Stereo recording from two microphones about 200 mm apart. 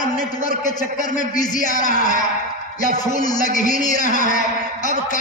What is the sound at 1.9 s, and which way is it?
Speech, 45° right (ahead or behind).